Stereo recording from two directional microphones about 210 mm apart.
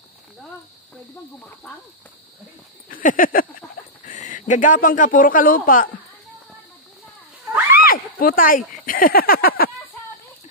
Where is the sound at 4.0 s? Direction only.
40° left (ahead or behind).